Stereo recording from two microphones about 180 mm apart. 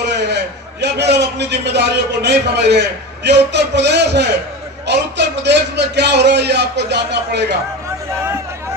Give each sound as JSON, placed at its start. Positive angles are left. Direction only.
{"t": 0.0, "sound": "a man's voice", "side_deg": -70}
{"t": 8.1, "sound": "speech", "side_deg": -15}